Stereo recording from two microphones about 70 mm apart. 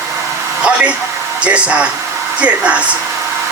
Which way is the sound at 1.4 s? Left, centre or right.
Centre.